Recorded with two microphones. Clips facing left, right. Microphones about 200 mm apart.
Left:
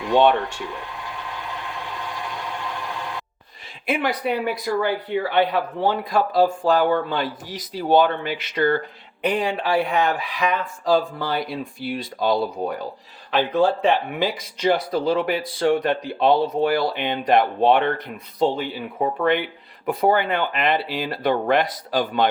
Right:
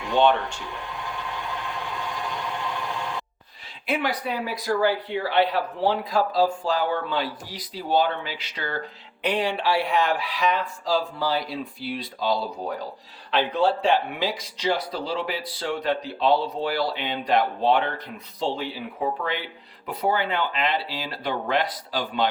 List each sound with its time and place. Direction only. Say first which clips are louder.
0.1 s speech: left 3 dB; 65° left (ahead or behind)
3.8 s speech: left 3 dB; 55° left (ahead or behind)
12.6 s speech: left 4 dB; 60° left (ahead or behind)
13.3 s speech: left 3 dB; 50° left (ahead or behind)
19.2 s speech: left 9 dB; 60° left (ahead or behind)